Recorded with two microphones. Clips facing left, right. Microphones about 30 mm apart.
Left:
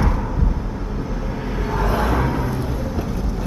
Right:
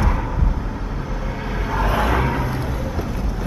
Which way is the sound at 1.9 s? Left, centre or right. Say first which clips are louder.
Right 1 dB; right.